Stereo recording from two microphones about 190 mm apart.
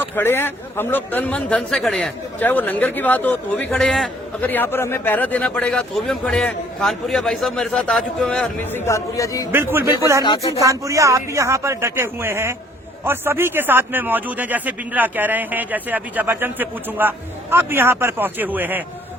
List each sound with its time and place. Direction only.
0.0 s a man's voice: 10° left (ahead or behind)
10.0 s speech: 15° right (ahead or behind)
10.2 s speech: 20° left (ahead or behind)
10.6 s speech: 15° right (ahead or behind)